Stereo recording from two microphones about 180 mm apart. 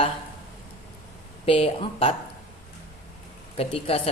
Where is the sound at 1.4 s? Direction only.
30° left (ahead or behind).